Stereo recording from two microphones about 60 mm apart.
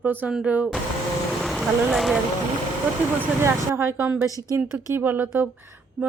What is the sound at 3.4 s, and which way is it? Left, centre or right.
Speech, right.